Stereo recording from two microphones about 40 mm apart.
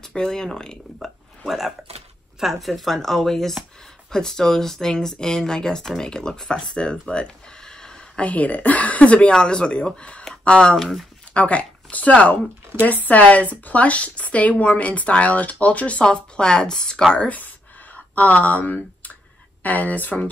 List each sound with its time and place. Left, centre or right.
0.0 s speech: centre
1.0 s a sound: centre
2.4 s speech: centre
8.2 s speech: left
9.3 s a woman's voice: left
10.8 s speech: centre
11.3 s speech: left
16.0 s a woman's voice: left
17.9 s speech: left